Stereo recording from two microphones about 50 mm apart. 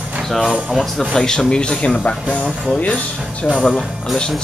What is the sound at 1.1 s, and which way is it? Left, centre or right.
Speech, centre.